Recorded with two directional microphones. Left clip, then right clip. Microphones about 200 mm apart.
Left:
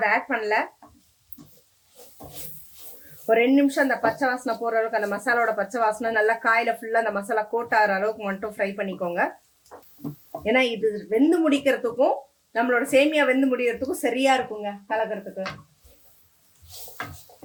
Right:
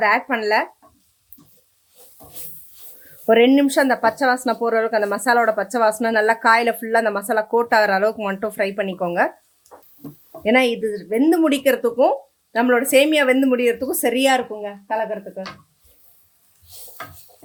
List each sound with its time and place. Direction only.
0.0 s speech: 55° right (ahead or behind)
3.2 s speech: 50° right (ahead or behind)
10.4 s speech: 45° right (ahead or behind)